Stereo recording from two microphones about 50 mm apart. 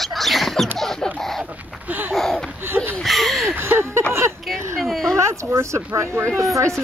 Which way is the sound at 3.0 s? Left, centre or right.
Centre.